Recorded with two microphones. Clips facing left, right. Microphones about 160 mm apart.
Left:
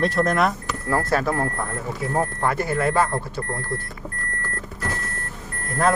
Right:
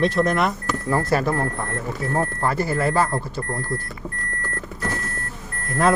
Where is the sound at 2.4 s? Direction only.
5° right (ahead or behind).